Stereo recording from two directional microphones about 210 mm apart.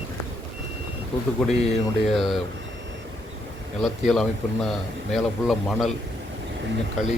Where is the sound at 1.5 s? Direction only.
30° left (ahead or behind).